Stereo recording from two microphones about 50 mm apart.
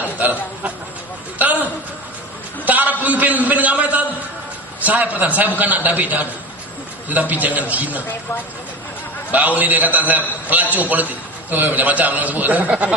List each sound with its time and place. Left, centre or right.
0.0 s a man's voice: right
2.6 s a man's voice: right
9.3 s a man's voice: right